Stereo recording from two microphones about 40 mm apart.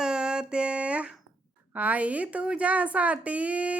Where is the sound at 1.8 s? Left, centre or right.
Right.